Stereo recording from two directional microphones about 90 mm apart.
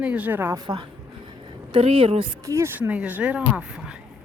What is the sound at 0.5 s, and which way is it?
Speech, 55° right (ahead or behind).